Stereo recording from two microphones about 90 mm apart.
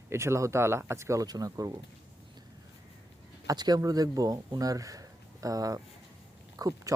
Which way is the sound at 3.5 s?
45° right (ahead or behind).